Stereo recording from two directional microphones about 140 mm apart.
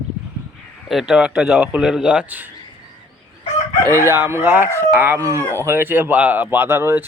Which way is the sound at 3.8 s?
20° right (ahead or behind).